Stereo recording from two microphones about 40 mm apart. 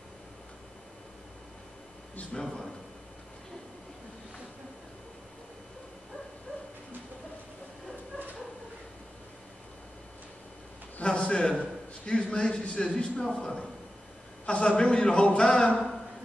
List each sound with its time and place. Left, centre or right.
2.4 s a man's voice: centre
11.1 s a sound: left
11.6 s a man's voice: left